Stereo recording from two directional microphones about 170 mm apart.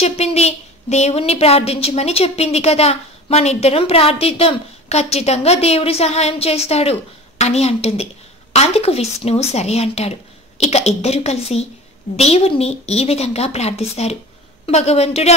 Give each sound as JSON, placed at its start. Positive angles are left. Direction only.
{"t": 0.0, "sound": "a woman's voice", "side_deg": 40}